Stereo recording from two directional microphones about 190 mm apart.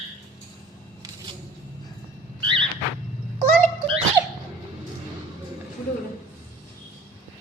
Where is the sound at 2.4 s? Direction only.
25° right (ahead or behind).